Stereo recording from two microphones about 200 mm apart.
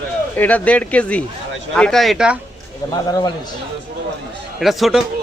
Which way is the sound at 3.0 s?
20° left (ahead or behind).